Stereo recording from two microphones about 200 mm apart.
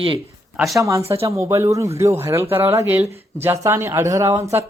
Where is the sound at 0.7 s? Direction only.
15° right (ahead or behind).